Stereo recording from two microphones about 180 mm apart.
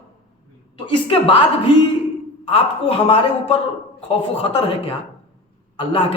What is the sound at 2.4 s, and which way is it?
A man's voice, 30° left (ahead or behind).